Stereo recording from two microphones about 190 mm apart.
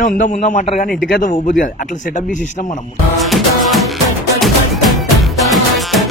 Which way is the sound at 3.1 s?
Centre (ahead or behind).